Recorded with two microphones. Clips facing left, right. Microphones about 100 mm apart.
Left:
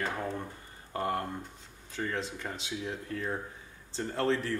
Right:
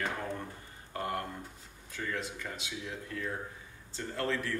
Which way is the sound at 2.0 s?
30° left (ahead or behind).